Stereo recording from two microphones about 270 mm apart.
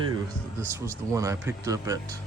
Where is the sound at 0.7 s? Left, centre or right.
Centre.